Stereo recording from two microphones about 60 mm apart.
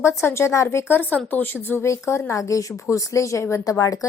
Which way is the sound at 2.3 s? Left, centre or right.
Left.